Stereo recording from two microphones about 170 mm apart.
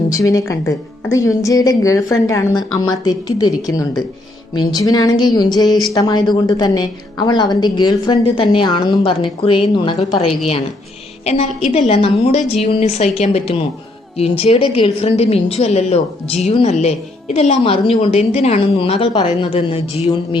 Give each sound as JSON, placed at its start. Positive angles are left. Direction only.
{"t": 0.1, "sound": "a woman's voice", "side_deg": 20}
{"t": 5.6, "sound": "speech", "side_deg": 0}
{"t": 5.9, "sound": "a woman's voice", "side_deg": 25}
{"t": 11.3, "sound": "a woman's voice", "side_deg": 35}